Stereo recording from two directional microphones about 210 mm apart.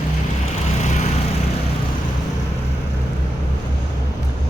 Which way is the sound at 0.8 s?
35° left (ahead or behind).